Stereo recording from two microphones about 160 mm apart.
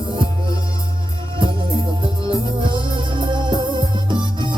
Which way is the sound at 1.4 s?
30° right (ahead or behind).